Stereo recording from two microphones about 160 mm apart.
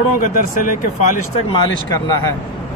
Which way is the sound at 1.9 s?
25° left (ahead or behind).